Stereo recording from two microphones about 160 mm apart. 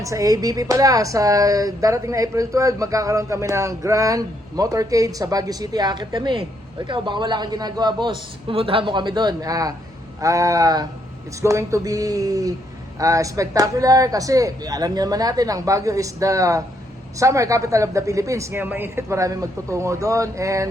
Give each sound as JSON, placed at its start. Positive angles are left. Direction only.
{"t": 0.0, "sound": "speech", "side_deg": -20}